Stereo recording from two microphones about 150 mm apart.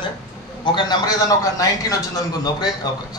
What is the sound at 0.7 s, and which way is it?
A man's voice, 30° left (ahead or behind).